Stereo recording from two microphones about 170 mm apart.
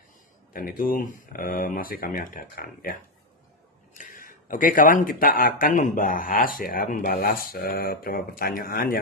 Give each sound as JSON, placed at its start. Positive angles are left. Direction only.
{"t": 0.5, "sound": "speech", "side_deg": 55}
{"t": 4.0, "sound": "speech", "side_deg": 55}